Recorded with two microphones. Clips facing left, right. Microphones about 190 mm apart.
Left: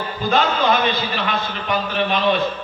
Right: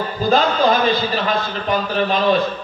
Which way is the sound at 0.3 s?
35° right (ahead or behind).